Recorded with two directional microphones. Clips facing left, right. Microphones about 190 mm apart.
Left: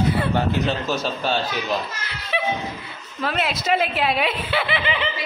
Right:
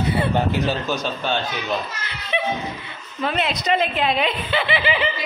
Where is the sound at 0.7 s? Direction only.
5° left (ahead or behind).